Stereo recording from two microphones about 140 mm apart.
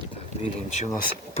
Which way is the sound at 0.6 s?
55° left (ahead or behind).